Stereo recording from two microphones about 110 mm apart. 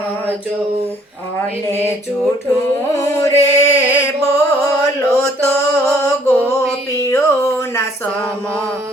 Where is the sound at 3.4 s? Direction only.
90° left.